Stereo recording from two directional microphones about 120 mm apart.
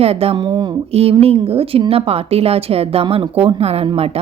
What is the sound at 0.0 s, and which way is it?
Speech, 55° right (ahead or behind).